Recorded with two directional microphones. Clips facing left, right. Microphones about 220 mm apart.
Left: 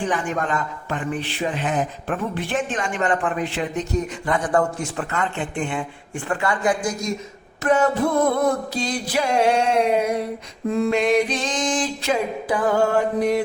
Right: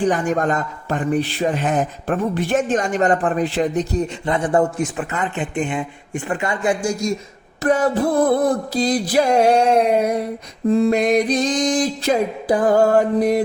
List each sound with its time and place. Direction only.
0.0 s a man's voice: 40° right (ahead or behind)